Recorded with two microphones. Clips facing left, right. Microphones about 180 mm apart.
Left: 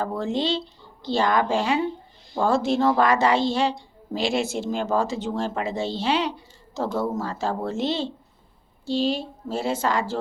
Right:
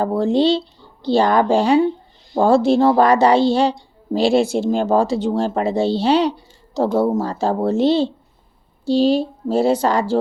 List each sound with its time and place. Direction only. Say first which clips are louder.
0.0 s a woman's voice: right 9 dB; 35° right (ahead or behind)